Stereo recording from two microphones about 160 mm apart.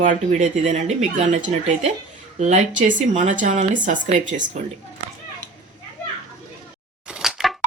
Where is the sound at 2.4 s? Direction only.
50° right (ahead or behind).